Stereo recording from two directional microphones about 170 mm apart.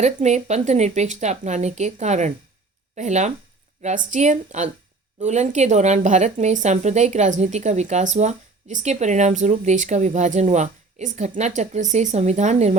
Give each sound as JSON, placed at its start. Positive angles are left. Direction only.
{"t": 0.0, "sound": "speech", "side_deg": -45}